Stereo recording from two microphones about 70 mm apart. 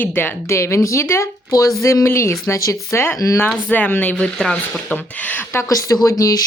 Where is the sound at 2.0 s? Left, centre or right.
Left.